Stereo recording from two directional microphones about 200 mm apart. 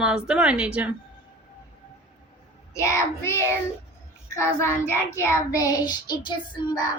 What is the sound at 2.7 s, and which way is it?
Child singing, 15° left (ahead or behind).